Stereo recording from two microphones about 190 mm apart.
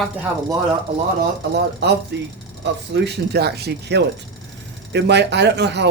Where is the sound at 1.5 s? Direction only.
60° right (ahead or behind).